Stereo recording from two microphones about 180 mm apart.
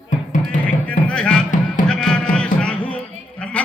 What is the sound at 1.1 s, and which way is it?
Music, 5° left (ahead or behind).